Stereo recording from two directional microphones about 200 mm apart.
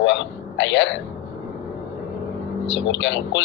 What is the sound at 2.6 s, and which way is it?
Speech, 65° left (ahead or behind).